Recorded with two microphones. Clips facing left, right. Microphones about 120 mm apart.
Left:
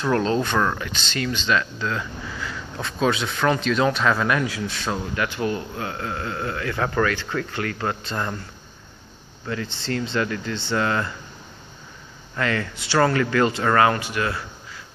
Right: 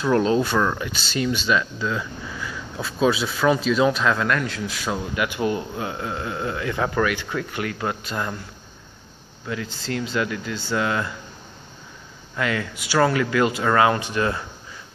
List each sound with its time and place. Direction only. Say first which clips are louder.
0.0 s speech: right 2 dB; 10° right (ahead or behind)
9.5 s speech: left 1 dB; 5° right (ahead or behind)
12.4 s speech: even; 10° right (ahead or behind)